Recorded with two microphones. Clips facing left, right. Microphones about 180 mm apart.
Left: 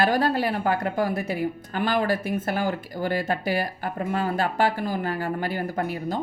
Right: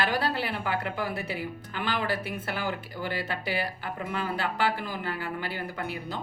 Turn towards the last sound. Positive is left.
turn(degrees=45)  # may be behind; listen again after turning